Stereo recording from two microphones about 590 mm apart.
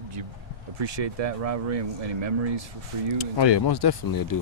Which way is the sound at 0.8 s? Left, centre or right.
Right.